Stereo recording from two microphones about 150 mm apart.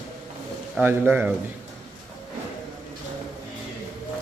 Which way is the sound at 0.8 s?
15° right (ahead or behind).